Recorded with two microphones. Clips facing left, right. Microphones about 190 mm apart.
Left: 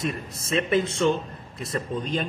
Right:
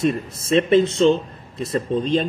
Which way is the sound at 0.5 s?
30° right (ahead or behind).